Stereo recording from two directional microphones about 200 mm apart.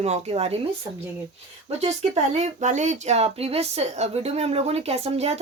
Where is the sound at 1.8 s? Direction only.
35° right (ahead or behind).